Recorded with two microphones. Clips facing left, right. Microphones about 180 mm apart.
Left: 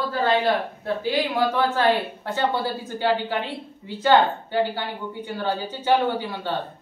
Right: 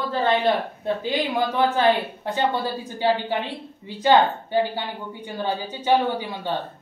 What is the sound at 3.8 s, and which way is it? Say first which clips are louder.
Speech: right 1 dB; 15° right (ahead or behind).